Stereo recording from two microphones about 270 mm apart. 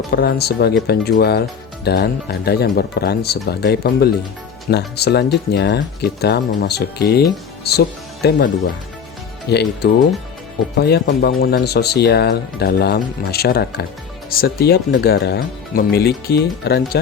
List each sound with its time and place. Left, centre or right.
0.1 s speech: left
9.5 s speech: left